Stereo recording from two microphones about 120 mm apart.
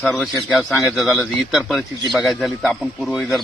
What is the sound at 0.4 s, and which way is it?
Speech, 5° right (ahead or behind).